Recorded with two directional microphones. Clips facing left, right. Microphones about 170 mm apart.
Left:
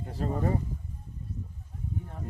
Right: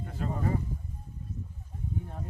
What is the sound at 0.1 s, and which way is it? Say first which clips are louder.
Speech: left 3 dB; 35° left (ahead or behind).